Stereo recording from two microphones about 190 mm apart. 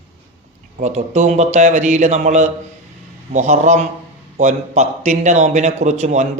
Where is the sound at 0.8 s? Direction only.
40° right (ahead or behind).